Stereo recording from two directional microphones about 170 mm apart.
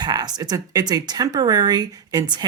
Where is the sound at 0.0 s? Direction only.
25° right (ahead or behind).